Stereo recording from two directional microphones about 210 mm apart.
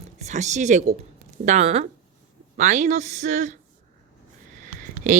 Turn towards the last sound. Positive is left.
turn(degrees=-40)  # may be behind; listen again after turning